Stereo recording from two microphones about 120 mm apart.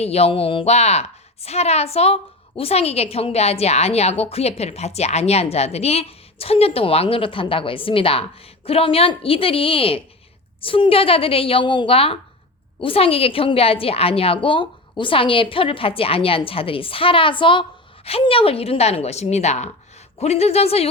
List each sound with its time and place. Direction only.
0.0 s a woman's voice: 60° left (ahead or behind)